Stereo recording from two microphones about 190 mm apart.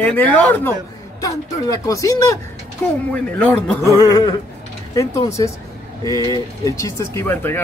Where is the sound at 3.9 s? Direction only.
20° left (ahead or behind).